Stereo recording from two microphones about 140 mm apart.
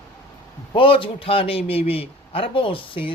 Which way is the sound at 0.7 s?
40° left (ahead or behind).